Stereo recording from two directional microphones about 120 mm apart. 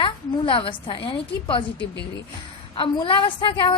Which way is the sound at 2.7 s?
45° left (ahead or behind).